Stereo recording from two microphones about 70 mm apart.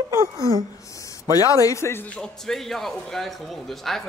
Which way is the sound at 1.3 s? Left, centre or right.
Left.